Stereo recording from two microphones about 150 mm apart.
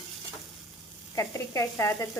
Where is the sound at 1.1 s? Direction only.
20° left (ahead or behind).